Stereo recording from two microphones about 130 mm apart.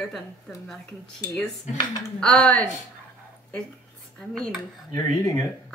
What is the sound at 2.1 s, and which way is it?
Speech, 10° left (ahead or behind).